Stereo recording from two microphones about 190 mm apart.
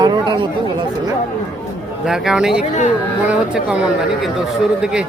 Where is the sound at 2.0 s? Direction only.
5° right (ahead or behind).